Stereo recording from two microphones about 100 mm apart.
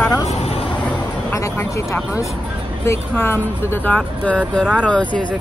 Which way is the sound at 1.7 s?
30° left (ahead or behind).